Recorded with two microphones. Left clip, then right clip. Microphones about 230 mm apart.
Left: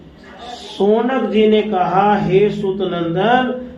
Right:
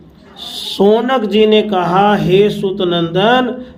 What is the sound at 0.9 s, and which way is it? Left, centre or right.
A man's voice, right.